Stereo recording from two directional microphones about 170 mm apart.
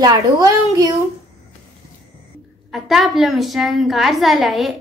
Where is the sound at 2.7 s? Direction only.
Centre (ahead or behind).